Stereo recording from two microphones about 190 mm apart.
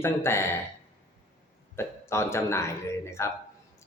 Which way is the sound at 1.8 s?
15° left (ahead or behind).